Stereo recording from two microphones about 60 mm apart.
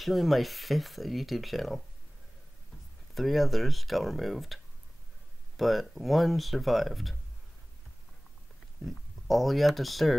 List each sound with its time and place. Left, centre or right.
0.0 s speech: centre
3.2 s speech: centre
5.6 s speech: centre
8.8 s speech: centre